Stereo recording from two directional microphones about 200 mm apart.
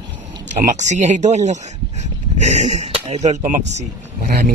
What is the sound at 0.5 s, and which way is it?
Speech, 35° right (ahead or behind).